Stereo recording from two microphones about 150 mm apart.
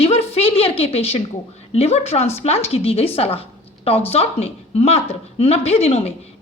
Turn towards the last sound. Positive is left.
turn(degrees=45)  # may be behind; listen again after turning